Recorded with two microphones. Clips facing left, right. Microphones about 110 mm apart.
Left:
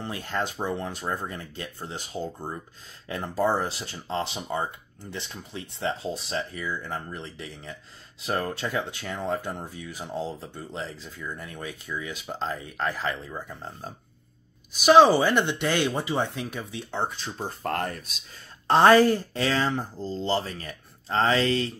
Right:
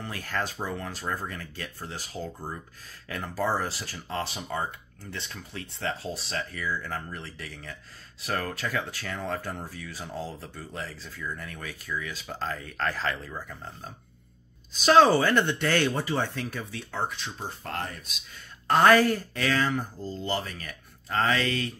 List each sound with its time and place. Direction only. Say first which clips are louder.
0.0 s speech: left 2 dB; 20° left (ahead or behind)
14.7 s speech: left 3 dB; 10° left (ahead or behind); by 17.5 s 30° left (ahead or behind)
17.6 s speech: left 7 dB; 45° left (ahead or behind)
18.7 s speech: left 3 dB; 30° left (ahead or behind)